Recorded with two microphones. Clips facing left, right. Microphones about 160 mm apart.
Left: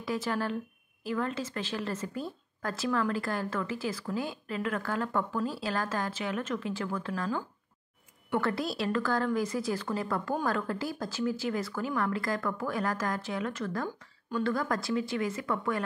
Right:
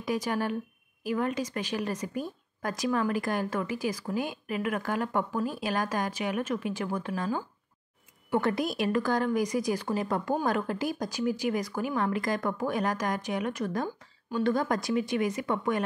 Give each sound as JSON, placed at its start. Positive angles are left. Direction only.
{"t": 0.0, "sound": "a woman's voice", "side_deg": -15}